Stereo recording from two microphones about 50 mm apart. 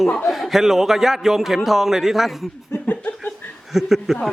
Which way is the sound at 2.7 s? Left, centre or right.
Left.